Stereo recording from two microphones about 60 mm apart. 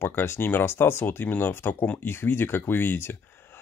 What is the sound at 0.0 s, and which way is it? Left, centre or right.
Speech, left.